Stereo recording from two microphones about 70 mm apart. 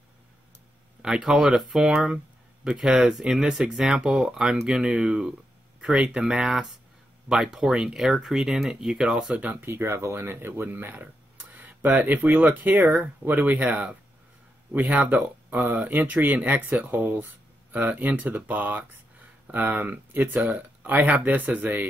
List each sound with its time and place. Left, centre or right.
1.0 s speech: centre
9.7 s speech: right
11.5 s a sound: right
12.3 s speech: right